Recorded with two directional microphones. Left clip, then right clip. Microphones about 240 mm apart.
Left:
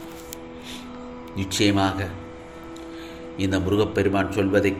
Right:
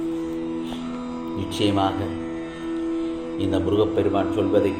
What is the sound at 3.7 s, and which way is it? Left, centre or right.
Speech, left.